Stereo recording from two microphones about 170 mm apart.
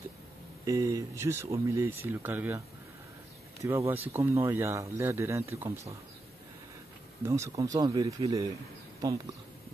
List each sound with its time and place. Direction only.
0.7 s speech: 20° right (ahead or behind)
3.6 s speech: 15° right (ahead or behind)
7.2 s speech: 15° right (ahead or behind)